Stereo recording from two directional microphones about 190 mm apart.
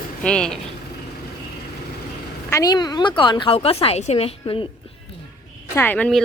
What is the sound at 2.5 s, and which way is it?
A woman's voice, 20° left (ahead or behind).